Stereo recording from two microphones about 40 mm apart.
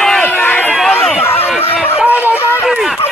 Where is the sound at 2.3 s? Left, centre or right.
Left.